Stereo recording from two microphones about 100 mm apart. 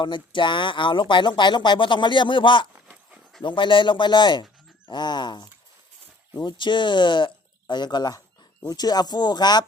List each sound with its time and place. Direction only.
0.0 s speech: 55° left (ahead or behind)